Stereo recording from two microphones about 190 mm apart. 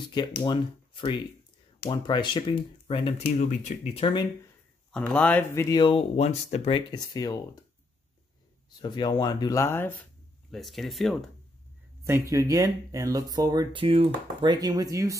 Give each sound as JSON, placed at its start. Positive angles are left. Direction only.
{"t": 0.4, "sound": "speech", "side_deg": 25}
{"t": 3.3, "sound": "speech", "side_deg": 40}
{"t": 4.9, "sound": "speech", "side_deg": 5}
{"t": 6.9, "sound": "speech", "side_deg": 20}
{"t": 8.6, "sound": "speech", "side_deg": 20}
{"t": 10.5, "sound": "speech", "side_deg": 0}
{"t": 12.0, "sound": "speech", "side_deg": -15}